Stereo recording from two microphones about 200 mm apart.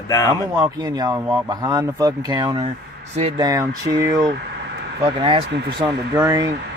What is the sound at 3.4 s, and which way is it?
Speech, 15° right (ahead or behind).